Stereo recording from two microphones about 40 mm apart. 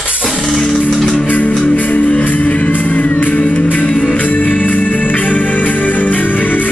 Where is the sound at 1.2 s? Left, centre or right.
Left.